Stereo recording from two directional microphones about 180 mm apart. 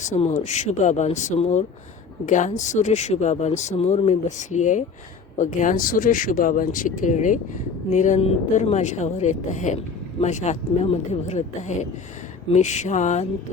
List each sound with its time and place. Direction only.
0.0 s speech: 40° left (ahead or behind)